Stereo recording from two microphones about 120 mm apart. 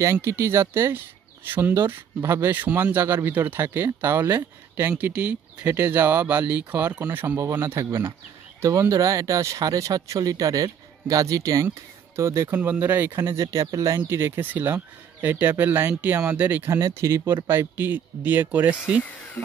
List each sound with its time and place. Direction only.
0.0 s speech: 25° right (ahead or behind)